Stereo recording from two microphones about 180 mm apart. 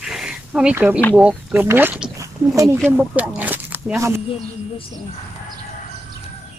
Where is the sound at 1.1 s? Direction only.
5° right (ahead or behind).